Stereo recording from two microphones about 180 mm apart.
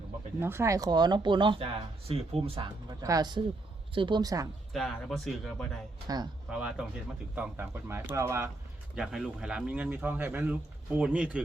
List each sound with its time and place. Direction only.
0.3 s speech: 15° right (ahead or behind); by 2.6 s 30° right (ahead or behind)
3.0 s speech: 20° right (ahead or behind)
4.7 s speech: centre (ahead or behind)